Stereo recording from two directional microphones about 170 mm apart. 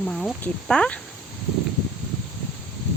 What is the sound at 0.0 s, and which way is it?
Speech, 5° left (ahead or behind).